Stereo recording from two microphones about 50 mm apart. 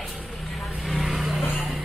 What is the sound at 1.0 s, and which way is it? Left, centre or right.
Vehicle, centre.